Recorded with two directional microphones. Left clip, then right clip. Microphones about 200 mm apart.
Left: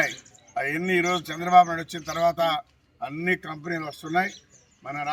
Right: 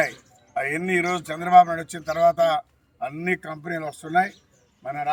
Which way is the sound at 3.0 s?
Centre (ahead or behind).